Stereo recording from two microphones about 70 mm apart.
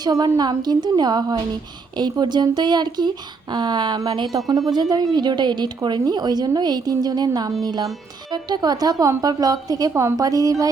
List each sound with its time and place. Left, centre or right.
0.0 s speech: right
4.4 s a woman's voice: right
8.3 s a woman's voice: right
9.9 s a woman's voice: right
10.2 s a woman's voice: right